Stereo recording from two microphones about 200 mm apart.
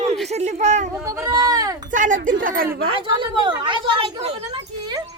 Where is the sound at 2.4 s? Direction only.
45° right (ahead or behind).